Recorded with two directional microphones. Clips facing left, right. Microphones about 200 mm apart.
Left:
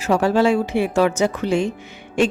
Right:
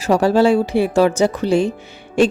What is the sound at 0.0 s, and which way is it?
A woman's voice, 35° right (ahead or behind).